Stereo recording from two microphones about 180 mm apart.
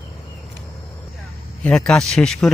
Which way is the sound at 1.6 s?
5° left (ahead or behind).